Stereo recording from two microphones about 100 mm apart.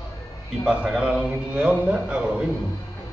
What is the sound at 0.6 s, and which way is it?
A man's voice, 10° right (ahead or behind).